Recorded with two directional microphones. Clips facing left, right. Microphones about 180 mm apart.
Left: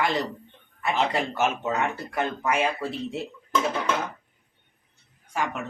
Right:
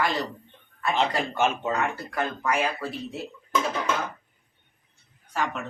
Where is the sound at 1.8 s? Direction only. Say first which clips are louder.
Left 1 dB; 25° left (ahead or behind).